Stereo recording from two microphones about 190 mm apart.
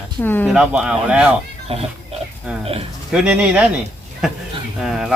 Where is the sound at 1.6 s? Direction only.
30° right (ahead or behind).